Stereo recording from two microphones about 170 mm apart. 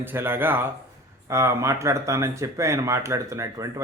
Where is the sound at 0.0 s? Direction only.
10° right (ahead or behind).